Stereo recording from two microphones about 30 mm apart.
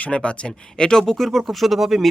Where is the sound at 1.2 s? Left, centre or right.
Centre.